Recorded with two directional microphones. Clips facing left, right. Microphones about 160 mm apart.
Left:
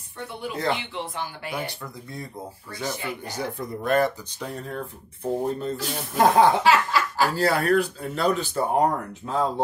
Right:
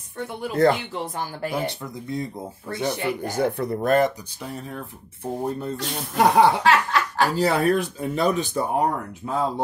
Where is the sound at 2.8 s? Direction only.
55° right (ahead or behind).